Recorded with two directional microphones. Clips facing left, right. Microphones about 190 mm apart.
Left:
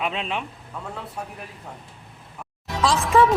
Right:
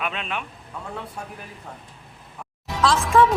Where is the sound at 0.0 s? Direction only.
25° left (ahead or behind).